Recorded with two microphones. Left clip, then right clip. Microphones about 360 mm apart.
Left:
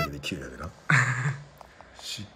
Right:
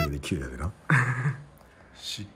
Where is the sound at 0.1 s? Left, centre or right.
Centre.